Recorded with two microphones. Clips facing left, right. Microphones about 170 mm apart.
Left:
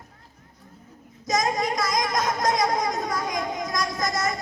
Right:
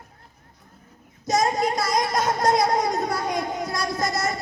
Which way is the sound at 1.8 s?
30° right (ahead or behind).